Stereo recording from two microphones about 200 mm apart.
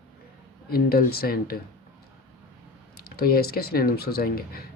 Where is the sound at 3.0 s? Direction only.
50° left (ahead or behind).